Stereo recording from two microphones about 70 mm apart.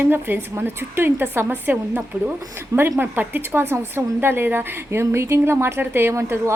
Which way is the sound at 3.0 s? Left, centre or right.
Right.